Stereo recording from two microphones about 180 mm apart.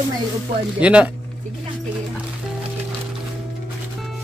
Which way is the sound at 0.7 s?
5° right (ahead or behind).